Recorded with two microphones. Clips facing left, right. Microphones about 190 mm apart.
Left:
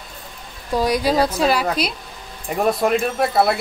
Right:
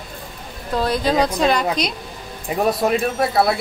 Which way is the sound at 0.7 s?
10° left (ahead or behind).